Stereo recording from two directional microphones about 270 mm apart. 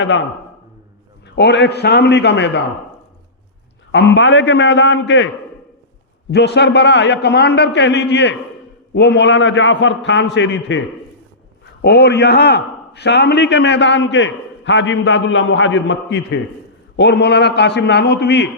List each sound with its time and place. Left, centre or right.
0.0 s a man's voice: left
1.4 s a man's voice: left
3.9 s a man's voice: left
6.3 s a man's voice: left